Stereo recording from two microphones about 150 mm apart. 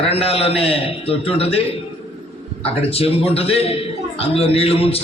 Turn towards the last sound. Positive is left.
turn(degrees=40)  # may be behind; listen again after turning